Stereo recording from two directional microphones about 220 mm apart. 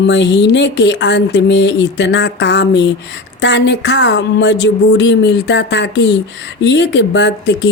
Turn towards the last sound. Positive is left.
turn(degrees=55)  # may be behind; listen again after turning